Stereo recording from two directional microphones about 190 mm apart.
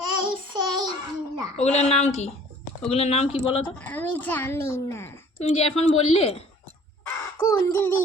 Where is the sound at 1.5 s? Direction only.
35° left (ahead or behind).